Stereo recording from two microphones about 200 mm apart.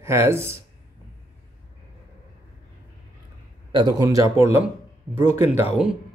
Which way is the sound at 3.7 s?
20° right (ahead or behind).